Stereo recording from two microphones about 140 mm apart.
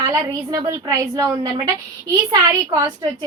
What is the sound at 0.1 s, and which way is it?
A woman's voice, 25° right (ahead or behind).